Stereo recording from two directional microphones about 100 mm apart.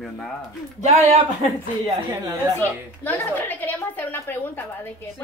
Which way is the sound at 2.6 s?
20° left (ahead or behind).